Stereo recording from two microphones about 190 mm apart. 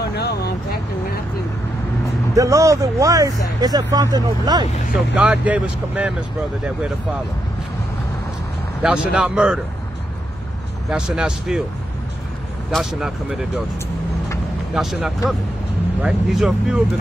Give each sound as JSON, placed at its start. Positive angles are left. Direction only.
{"t": 0.0, "sound": "vehicle", "side_deg": 60}
{"t": 2.3, "sound": "speech", "side_deg": -15}
{"t": 4.9, "sound": "speech", "side_deg": -5}
{"t": 8.8, "sound": "speech", "side_deg": -5}
{"t": 10.9, "sound": "speech", "side_deg": -5}
{"t": 12.7, "sound": "speech", "side_deg": 0}
{"t": 14.7, "sound": "speech", "side_deg": -5}